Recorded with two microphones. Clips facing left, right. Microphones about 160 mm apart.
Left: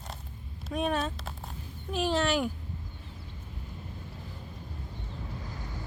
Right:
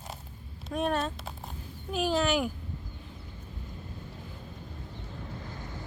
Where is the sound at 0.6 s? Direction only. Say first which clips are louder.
Even; centre (ahead or behind).